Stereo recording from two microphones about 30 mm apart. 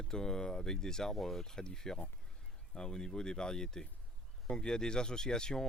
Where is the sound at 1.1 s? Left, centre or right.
Centre.